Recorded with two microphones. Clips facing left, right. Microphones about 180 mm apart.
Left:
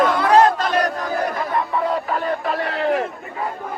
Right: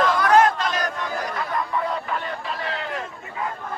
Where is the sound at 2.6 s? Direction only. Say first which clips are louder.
Left 9 dB; 60° left (ahead or behind).